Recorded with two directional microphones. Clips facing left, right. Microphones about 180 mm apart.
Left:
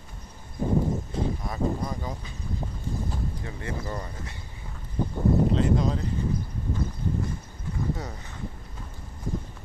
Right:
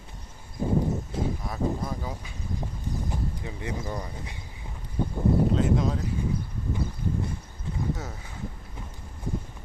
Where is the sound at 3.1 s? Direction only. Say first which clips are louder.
Right 1 dB; 15° right (ahead or behind).